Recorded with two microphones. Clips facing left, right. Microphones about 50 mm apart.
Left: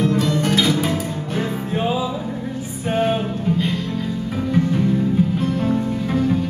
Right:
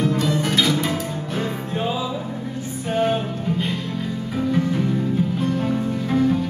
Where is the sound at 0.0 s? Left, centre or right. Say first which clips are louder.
Left 2 dB; centre.